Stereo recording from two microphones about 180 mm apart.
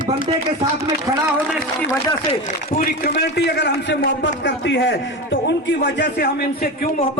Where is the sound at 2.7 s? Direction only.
55° left (ahead or behind).